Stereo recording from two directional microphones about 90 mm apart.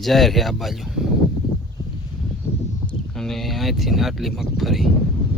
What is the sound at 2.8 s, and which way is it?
Speech, 5° left (ahead or behind).